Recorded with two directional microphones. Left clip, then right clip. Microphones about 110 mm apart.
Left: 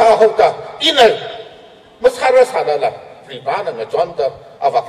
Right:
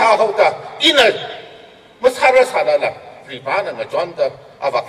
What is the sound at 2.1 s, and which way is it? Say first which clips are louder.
A man's voice: even; 35° left (ahead or behind).